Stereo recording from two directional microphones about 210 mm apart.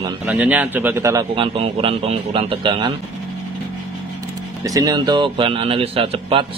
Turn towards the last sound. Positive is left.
turn(degrees=-25)  # may be behind; listen again after turning